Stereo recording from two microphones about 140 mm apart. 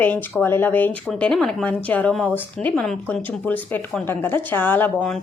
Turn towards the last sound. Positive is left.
turn(degrees=10)  # may be behind; listen again after turning